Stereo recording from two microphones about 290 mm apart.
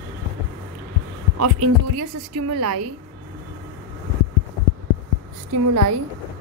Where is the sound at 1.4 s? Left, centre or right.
Right.